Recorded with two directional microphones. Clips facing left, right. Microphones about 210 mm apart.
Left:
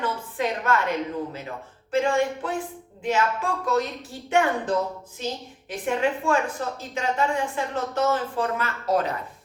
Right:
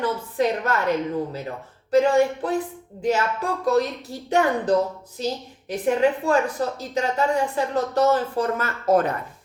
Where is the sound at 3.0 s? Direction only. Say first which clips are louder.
Right 2 dB; 40° right (ahead or behind).